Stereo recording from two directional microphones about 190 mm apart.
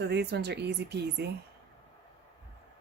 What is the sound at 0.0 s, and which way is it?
Speech, 60° right (ahead or behind).